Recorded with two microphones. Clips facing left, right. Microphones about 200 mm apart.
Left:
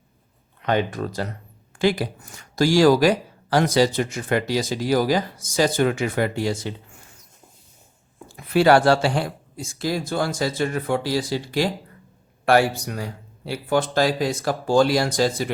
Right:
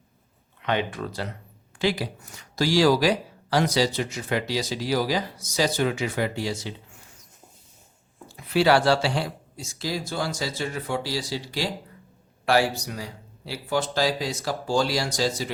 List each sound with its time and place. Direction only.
0.6 s speech: 40° left (ahead or behind)
8.4 s speech: 50° left (ahead or behind)